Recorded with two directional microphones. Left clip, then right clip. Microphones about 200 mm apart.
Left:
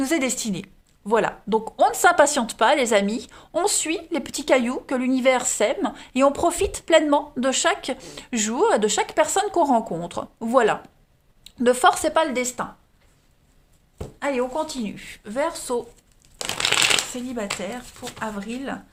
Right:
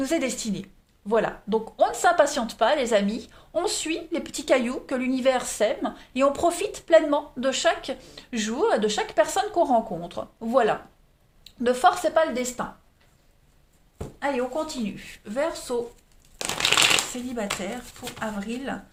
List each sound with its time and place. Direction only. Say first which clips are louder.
0.0 s a woman's voice: left 3 dB; 40° left (ahead or behind)
14.2 s a woman's voice: left 2 dB; 30° left (ahead or behind)
16.4 s a sound: left 1 dB; 20° left (ahead or behind)
17.2 s speech: left 1 dB; 25° left (ahead or behind)